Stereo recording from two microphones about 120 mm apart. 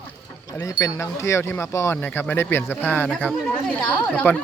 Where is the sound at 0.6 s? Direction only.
30° left (ahead or behind).